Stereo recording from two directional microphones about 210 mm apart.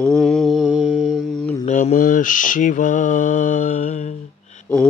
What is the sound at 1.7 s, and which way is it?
Speech, 35° left (ahead or behind).